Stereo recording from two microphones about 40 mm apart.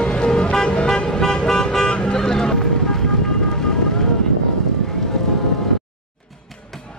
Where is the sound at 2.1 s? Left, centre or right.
Centre.